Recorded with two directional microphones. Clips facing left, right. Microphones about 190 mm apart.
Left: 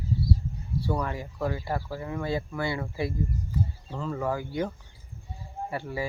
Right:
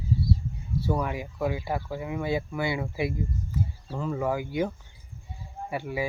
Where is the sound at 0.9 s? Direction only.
10° right (ahead or behind).